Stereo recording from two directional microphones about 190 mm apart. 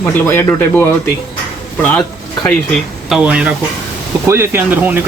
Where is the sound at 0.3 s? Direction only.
10° left (ahead or behind).